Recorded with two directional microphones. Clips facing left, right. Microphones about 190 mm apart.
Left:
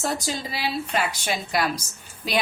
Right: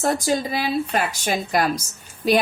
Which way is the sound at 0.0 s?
50° right (ahead or behind).